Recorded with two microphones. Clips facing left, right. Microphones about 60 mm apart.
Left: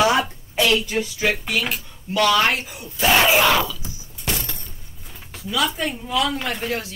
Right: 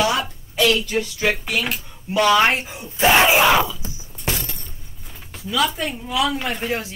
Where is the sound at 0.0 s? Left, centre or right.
Left.